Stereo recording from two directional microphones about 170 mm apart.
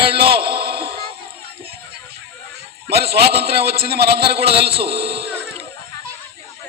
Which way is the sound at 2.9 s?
70° right (ahead or behind).